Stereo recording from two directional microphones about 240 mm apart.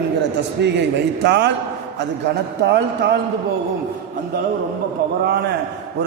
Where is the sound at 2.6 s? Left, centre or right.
Right.